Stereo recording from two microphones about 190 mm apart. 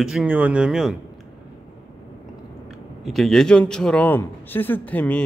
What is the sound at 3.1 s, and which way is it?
Speech, centre (ahead or behind).